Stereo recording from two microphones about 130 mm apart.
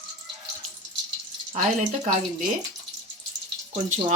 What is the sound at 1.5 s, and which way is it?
Speech, 65° right (ahead or behind).